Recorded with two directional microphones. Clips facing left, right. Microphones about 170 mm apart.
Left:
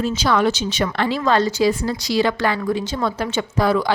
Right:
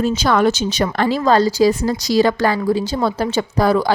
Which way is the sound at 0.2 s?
50° right (ahead or behind).